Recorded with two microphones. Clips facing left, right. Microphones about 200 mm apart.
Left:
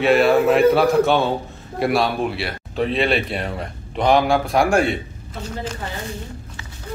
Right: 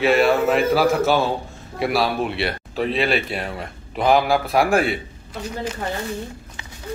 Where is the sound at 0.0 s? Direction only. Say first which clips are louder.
Left 2 dB; centre (ahead or behind).